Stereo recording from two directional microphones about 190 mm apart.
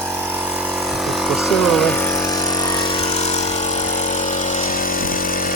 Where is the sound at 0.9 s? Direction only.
Centre (ahead or behind).